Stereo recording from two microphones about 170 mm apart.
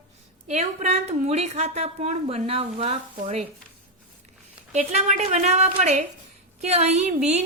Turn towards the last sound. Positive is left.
turn(degrees=-40)  # may be behind; listen again after turning